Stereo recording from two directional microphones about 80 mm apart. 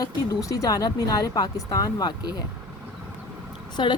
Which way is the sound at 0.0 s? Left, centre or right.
Left.